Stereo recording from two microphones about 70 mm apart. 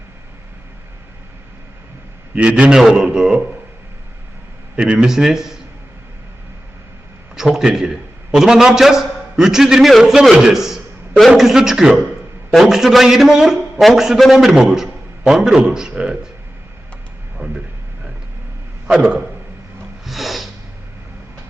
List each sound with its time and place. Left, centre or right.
2.3 s a man's voice: centre
4.8 s a man's voice: centre
7.3 s a man's voice: centre
17.3 s a sound: centre
18.9 s a man's voice: centre
20.1 s snort: centre